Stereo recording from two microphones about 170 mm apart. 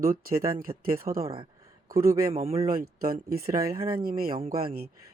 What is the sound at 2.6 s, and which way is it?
Speech, 60° right (ahead or behind).